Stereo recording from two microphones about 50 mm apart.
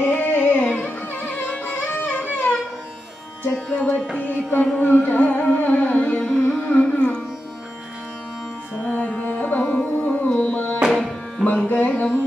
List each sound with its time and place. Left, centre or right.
0.0 s carnatic music: left
3.7 s music: centre
4.2 s music: left
8.8 s music: left
9.6 s music: centre
10.9 s tabla: centre
11.4 s music: centre
11.7 s music: left